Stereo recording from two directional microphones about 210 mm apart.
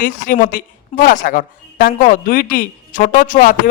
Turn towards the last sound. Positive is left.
turn(degrees=40)  # may be behind; listen again after turning